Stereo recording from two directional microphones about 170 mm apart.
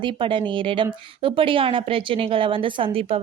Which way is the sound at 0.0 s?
30° right (ahead or behind).